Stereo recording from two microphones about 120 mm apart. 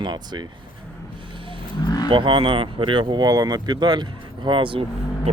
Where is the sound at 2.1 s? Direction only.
45° right (ahead or behind).